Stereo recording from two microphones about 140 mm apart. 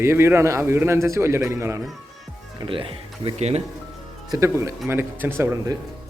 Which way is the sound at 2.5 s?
40° right (ahead or behind).